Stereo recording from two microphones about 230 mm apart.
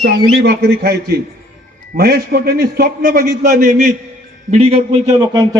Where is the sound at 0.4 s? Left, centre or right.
Right.